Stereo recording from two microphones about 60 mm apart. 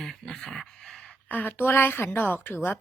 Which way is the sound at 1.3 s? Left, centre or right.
Left.